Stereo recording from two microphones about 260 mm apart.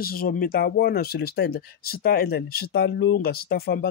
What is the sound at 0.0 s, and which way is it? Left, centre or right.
Speech, left.